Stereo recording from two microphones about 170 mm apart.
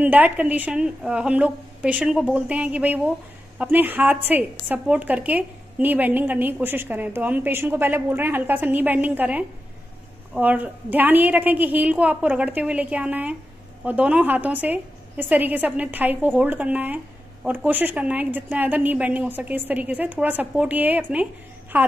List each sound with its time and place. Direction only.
0.0 s a woman's voice: 10° right (ahead or behind)